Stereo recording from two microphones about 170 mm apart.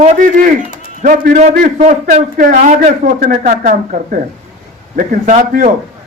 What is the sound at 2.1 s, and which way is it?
Speech, 55° right (ahead or behind).